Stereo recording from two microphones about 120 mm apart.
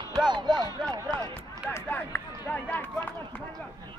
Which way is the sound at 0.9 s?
35° right (ahead or behind).